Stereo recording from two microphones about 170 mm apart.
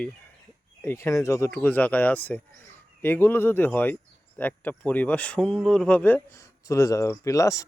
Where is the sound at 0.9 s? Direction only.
15° left (ahead or behind).